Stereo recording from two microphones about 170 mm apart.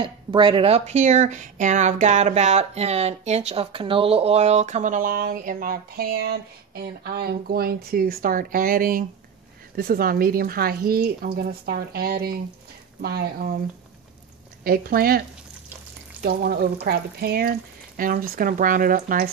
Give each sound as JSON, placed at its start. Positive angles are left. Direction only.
{"t": 0.0, "sound": "speech", "side_deg": -30}
{"t": 14.6, "sound": "speech", "side_deg": -60}